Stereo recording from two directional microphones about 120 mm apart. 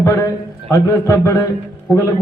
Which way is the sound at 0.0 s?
25° left (ahead or behind).